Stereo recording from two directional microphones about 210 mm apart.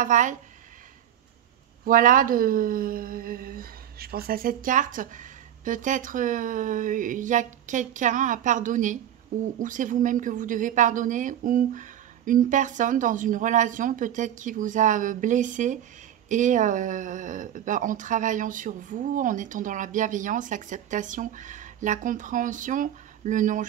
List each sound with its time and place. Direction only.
0.0 s speech: 35° right (ahead or behind)
1.9 s speech: 40° right (ahead or behind)